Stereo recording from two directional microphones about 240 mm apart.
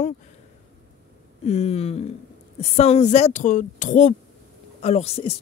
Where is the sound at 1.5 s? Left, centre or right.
Left.